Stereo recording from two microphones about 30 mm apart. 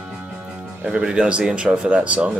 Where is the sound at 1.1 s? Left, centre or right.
Right.